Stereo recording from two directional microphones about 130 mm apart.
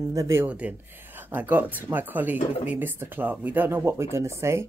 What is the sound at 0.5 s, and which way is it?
Speech, 10° right (ahead or behind).